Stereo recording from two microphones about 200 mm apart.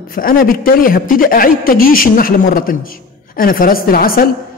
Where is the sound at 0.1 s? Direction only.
45° left (ahead or behind).